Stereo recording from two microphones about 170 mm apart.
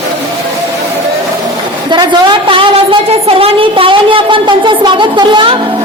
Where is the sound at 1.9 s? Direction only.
25° right (ahead or behind).